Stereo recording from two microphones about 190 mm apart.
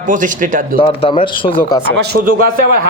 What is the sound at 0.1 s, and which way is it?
Speech, 45° right (ahead or behind).